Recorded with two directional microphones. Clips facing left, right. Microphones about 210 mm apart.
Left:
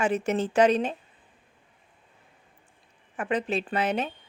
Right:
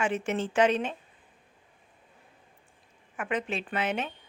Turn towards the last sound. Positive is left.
turn(degrees=35)  # may be behind; listen again after turning